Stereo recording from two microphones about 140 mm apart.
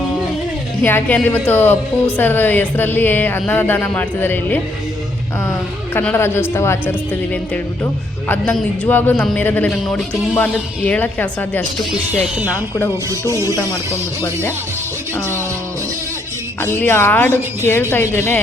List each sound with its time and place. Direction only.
0.8 s a woman's voice: 15° left (ahead or behind)
5.9 s a woman's voice: 10° left (ahead or behind)
12.5 s music: 20° left (ahead or behind)
16.6 s a woman's voice: 15° left (ahead or behind)